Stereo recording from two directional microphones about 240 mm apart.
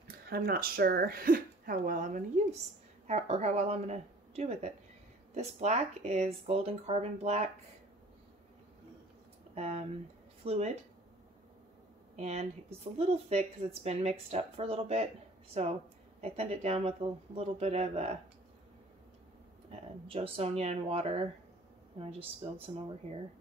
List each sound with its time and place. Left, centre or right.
0.3 s speech: right
9.6 s speech: right
12.2 s speech: right
19.7 s speech: right
22.4 s speech: right